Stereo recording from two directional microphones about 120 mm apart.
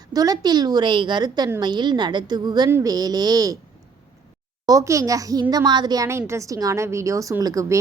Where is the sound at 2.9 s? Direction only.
35° right (ahead or behind).